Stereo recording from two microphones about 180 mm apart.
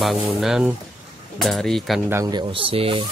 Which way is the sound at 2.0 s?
15° right (ahead or behind).